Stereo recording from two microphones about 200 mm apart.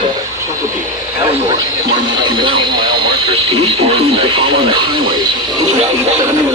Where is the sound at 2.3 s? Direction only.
25° right (ahead or behind).